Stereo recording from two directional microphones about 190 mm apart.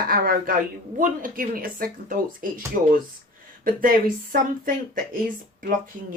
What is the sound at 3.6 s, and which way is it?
Speech, 45° right (ahead or behind).